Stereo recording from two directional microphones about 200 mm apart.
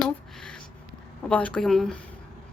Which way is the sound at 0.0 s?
5° left (ahead or behind).